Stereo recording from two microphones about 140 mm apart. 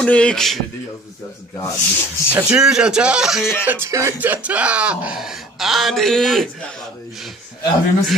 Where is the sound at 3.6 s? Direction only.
15° right (ahead or behind); by 6.5 s 5° left (ahead or behind).